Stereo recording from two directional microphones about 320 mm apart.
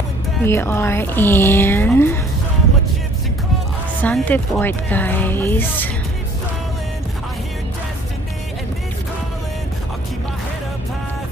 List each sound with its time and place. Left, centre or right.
0.4 s speech: centre
4.0 s speech: centre